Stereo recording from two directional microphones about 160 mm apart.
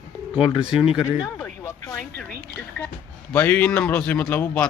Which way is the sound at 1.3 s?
15° left (ahead or behind).